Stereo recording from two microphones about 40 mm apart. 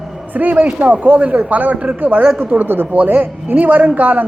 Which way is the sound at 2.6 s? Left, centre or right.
Right.